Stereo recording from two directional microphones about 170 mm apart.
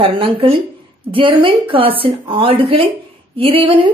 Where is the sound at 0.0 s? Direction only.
35° right (ahead or behind).